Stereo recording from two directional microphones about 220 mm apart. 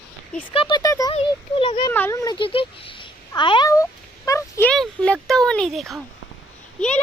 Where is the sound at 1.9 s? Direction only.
10° left (ahead or behind).